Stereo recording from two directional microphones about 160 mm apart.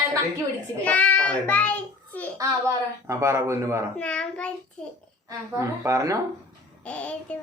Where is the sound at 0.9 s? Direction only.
10° left (ahead or behind).